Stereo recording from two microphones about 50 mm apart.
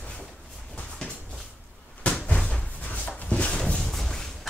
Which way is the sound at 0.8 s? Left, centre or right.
Left.